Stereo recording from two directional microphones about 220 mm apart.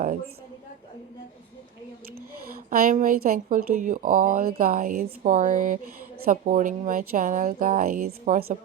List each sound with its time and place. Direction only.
2.6 s speech: 40° right (ahead or behind)